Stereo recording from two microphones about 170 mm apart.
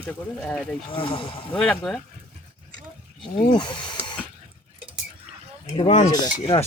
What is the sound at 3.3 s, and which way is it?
Speech, 25° left (ahead or behind).